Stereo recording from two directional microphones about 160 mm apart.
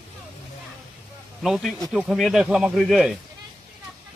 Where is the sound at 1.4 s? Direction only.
Centre (ahead or behind).